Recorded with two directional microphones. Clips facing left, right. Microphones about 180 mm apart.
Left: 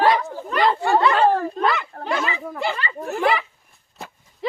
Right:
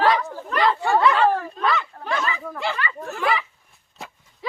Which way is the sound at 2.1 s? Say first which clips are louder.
Left 2 dB; 15° left (ahead or behind).